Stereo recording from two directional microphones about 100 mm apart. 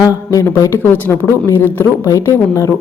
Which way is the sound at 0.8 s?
20° left (ahead or behind).